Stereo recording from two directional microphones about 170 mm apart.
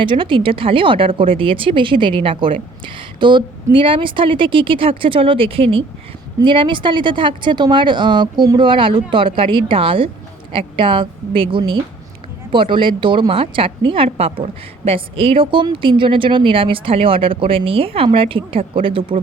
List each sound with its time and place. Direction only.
0.0 s a woman's voice: 30° right (ahead or behind)